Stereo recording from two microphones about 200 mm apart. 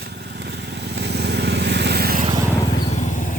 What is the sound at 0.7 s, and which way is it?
Vehicle, 55° right (ahead or behind).